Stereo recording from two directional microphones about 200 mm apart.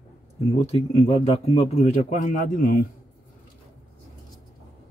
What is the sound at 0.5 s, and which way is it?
Speech, 30° left (ahead or behind).